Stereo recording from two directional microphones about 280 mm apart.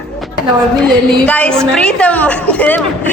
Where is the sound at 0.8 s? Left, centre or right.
Centre.